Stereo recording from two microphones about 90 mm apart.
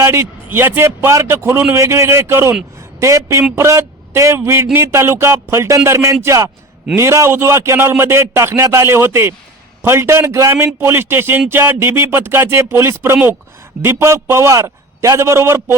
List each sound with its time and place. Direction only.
0.0 s a man's voice: 30° right (ahead or behind)